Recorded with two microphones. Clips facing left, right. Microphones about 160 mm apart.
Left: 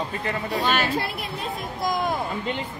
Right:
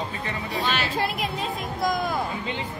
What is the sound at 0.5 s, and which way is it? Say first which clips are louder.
Speech: left 3 dB; 50° left (ahead or behind).